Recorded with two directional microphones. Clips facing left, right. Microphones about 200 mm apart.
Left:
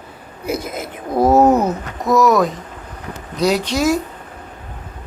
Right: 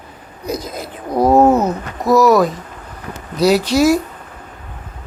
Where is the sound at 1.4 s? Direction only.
15° left (ahead or behind).